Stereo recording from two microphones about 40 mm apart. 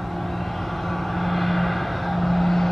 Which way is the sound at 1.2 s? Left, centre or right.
Centre.